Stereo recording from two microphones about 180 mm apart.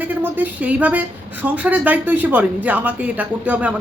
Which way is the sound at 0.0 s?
10° right (ahead or behind).